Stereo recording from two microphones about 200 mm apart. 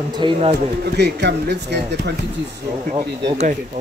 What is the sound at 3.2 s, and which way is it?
Speech, 35° right (ahead or behind).